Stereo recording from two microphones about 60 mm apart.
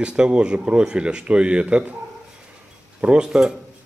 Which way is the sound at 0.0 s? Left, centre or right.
Centre.